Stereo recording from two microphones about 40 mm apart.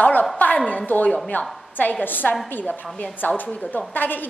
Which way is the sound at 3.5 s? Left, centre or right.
Left.